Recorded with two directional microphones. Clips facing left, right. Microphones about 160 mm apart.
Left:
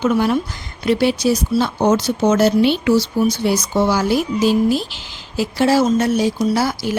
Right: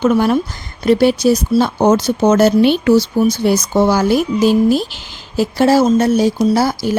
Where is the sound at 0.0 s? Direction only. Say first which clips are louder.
Right 3 dB; 50° right (ahead or behind).